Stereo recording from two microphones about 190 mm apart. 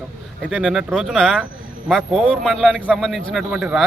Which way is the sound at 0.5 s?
Centre (ahead or behind).